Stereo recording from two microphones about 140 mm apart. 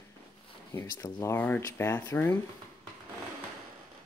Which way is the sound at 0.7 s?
20° left (ahead or behind).